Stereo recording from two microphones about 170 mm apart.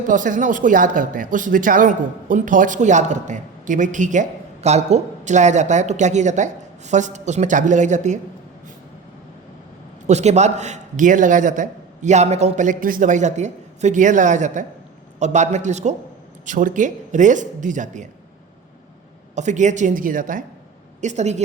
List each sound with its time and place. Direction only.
0.1 s speech: 50° right (ahead or behind)
10.1 s speech: 40° right (ahead or behind)
19.4 s speech: 45° right (ahead or behind)